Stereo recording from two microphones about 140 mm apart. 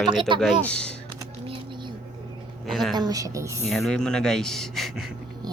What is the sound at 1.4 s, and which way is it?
Typing, 35° right (ahead or behind).